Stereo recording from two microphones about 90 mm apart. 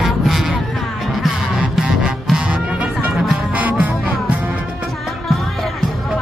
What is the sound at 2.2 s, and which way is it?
Music, 10° right (ahead or behind).